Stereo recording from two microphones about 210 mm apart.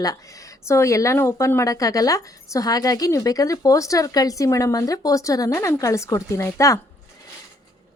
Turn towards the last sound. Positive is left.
turn(degrees=15)  # may be behind; listen again after turning